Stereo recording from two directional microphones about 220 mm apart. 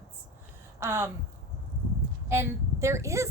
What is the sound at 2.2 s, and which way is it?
A woman's voice, 10° right (ahead or behind).